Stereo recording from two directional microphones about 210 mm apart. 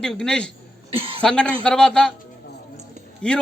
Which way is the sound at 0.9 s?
25° right (ahead or behind).